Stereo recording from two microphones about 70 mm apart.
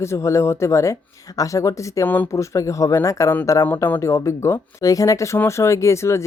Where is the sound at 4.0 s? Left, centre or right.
Left.